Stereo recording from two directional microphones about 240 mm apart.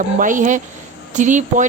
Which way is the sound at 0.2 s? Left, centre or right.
Right.